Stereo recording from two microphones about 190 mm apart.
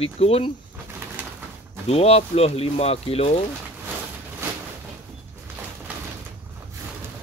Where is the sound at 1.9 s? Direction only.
30° left (ahead or behind).